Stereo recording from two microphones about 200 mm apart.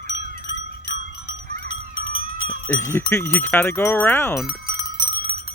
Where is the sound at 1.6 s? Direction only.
80° left.